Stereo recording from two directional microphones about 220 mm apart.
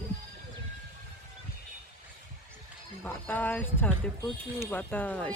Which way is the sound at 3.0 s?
10° left (ahead or behind).